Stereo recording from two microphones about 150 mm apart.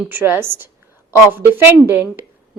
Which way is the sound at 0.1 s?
15° right (ahead or behind).